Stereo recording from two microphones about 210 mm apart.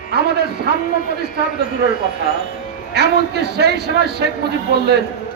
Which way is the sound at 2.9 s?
50° right (ahead or behind).